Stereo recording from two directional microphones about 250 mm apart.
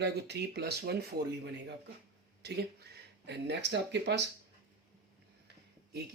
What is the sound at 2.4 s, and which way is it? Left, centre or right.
Speech, right.